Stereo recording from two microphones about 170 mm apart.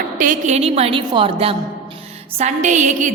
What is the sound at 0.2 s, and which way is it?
A woman's voice, 50° right (ahead or behind).